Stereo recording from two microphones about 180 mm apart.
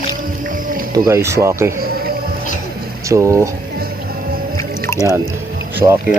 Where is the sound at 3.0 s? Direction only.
15° right (ahead or behind).